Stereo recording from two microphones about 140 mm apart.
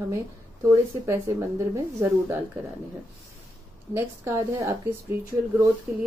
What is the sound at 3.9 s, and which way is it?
A woman's voice, 20° right (ahead or behind).